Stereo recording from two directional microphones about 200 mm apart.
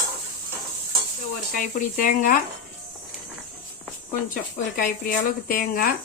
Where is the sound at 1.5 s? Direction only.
45° left (ahead or behind).